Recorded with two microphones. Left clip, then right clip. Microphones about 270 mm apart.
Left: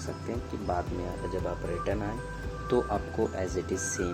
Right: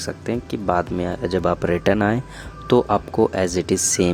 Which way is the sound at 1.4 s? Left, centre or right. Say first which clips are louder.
Right 15 dB; right.